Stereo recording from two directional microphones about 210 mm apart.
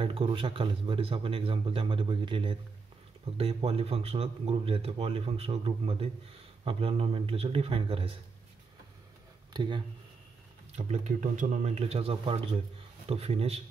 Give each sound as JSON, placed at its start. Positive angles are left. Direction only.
{"t": 0.0, "sound": "speech", "side_deg": -25}
{"t": 9.5, "sound": "speech", "side_deg": -20}
{"t": 10.8, "sound": "speech", "side_deg": -35}